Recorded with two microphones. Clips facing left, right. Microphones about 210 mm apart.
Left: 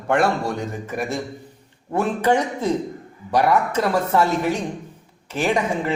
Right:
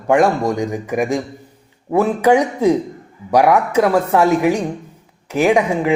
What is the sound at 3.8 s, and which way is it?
Speech, 70° right (ahead or behind).